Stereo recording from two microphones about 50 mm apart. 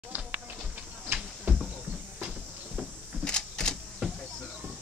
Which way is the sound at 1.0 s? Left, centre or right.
Right.